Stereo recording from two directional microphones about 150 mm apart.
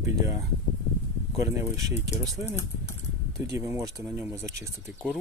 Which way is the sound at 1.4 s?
20° right (ahead or behind).